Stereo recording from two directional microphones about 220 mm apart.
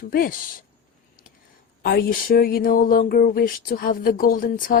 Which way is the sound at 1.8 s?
45° left (ahead or behind).